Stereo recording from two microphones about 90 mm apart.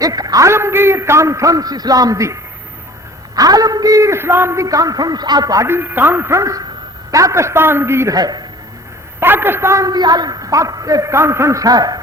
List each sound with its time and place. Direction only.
0.0 s a man's voice: 45° right (ahead or behind)
0.4 s a man's voice: 30° right (ahead or behind)
4.6 s a man's voice: 40° right (ahead or behind)
5.6 s a man's voice: 25° right (ahead or behind)
8.1 s a man's voice: 45° right (ahead or behind)
9.2 s a man's voice: 25° right (ahead or behind); by 11.9 s 45° right (ahead or behind)